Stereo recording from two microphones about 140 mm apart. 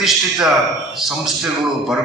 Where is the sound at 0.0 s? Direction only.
Centre (ahead or behind).